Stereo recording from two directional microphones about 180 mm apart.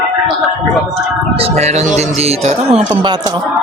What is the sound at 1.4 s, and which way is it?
Speech, 40° right (ahead or behind).